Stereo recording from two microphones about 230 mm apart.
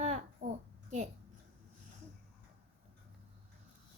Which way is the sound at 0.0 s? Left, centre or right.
Right.